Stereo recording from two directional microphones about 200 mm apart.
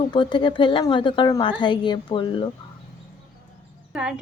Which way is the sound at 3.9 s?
5° right (ahead or behind).